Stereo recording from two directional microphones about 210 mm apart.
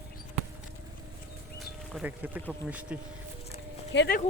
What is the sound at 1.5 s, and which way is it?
Speech, 5° right (ahead or behind).